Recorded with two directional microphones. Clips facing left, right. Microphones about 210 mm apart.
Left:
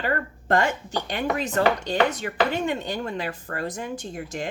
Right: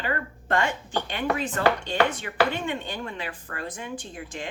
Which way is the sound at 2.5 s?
40° left (ahead or behind).